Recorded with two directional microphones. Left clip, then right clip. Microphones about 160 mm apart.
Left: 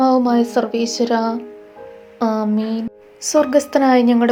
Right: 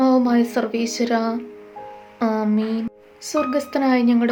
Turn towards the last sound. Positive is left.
turn(degrees=10)  # may be behind; listen again after turning